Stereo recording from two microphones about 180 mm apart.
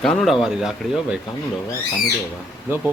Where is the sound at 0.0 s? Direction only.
Centre (ahead or behind).